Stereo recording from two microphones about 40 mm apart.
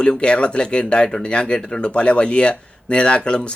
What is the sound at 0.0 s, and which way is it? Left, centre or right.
Speech, left.